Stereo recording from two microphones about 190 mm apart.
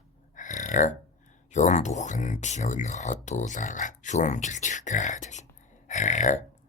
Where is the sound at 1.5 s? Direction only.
40° left (ahead or behind).